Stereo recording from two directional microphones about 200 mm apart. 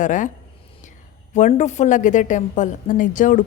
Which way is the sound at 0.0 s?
40° left (ahead or behind).